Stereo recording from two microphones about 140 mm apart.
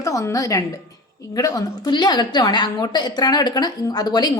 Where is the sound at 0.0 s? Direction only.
25° left (ahead or behind).